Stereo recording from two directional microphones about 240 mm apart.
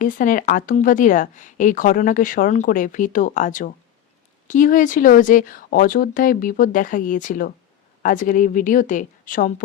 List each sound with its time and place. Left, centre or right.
0.0 s speech: left